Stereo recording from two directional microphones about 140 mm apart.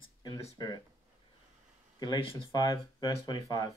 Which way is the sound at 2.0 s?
30° left (ahead or behind).